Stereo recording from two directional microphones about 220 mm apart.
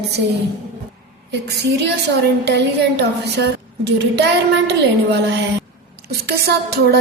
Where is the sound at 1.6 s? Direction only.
50° right (ahead or behind).